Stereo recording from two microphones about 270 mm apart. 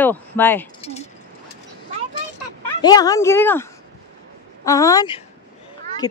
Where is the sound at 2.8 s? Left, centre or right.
Centre.